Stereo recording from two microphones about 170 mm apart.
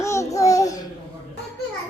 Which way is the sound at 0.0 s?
15° left (ahead or behind).